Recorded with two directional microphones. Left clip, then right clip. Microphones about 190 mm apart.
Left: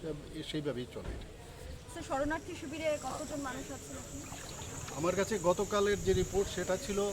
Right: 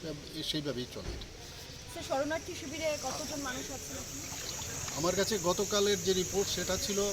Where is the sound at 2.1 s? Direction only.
30° right (ahead or behind).